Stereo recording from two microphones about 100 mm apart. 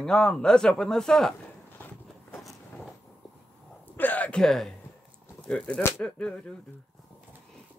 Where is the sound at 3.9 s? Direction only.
15° left (ahead or behind).